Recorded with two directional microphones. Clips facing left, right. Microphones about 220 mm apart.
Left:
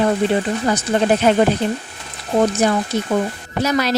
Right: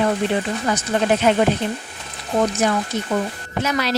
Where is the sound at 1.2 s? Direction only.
35° left (ahead or behind).